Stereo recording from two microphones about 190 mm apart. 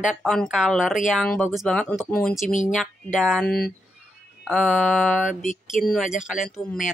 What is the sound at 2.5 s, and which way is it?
Speech, 40° left (ahead or behind).